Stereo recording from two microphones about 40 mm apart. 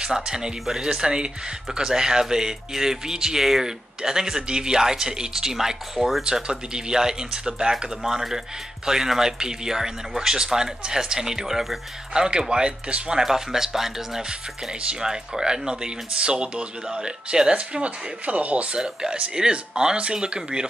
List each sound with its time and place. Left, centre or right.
0.0 s speech: centre
8.0 s speech: centre
12.1 s speech: centre
17.7 s speech: right
19.3 s speech: right